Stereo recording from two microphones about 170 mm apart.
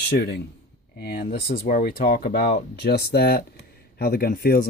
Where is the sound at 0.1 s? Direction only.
65° left (ahead or behind).